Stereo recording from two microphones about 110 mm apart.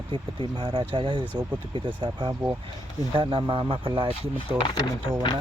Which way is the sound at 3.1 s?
50° right (ahead or behind).